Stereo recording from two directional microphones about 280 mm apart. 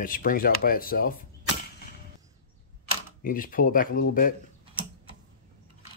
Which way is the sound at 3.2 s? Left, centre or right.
Left.